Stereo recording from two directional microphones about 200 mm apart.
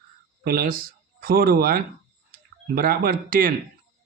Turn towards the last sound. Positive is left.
turn(degrees=-45)  # may be behind; listen again after turning